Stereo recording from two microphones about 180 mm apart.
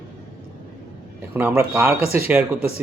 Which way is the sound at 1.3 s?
15° right (ahead or behind).